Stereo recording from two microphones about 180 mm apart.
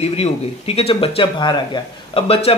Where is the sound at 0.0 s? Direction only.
35° left (ahead or behind).